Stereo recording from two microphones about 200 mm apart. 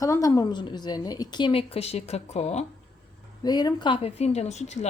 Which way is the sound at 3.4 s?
20° left (ahead or behind).